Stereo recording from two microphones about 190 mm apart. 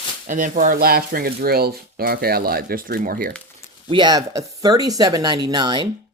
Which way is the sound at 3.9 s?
25° right (ahead or behind).